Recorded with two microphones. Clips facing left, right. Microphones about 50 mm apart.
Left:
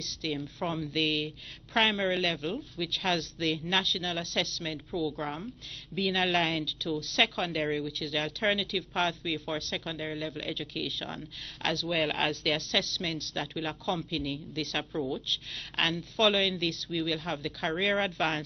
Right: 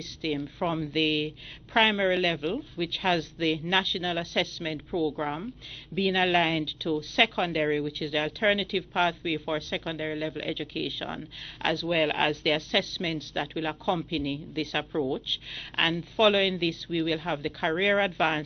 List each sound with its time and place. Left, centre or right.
0.0 s a woman's voice: centre
14.9 s speech: centre
15.2 s a woman's voice: centre